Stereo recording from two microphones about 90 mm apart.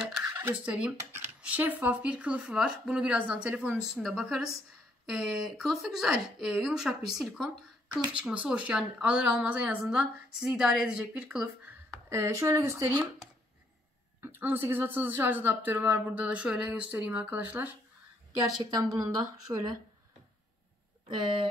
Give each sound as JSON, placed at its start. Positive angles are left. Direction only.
{"t": 0.3, "sound": "a woman's voice", "side_deg": -20}
{"t": 3.9, "sound": "speech", "side_deg": -5}
{"t": 8.1, "sound": "a woman's voice", "side_deg": -15}
{"t": 12.1, "sound": "speech", "side_deg": -30}
{"t": 14.2, "sound": "speech", "side_deg": -25}
{"t": 18.6, "sound": "speech", "side_deg": -45}